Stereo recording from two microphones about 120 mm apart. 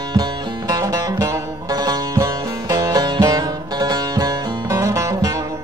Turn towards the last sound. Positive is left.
turn(degrees=-25)  # may be behind; listen again after turning